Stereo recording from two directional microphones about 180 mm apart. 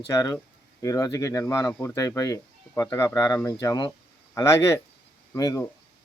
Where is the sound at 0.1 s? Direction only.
15° left (ahead or behind).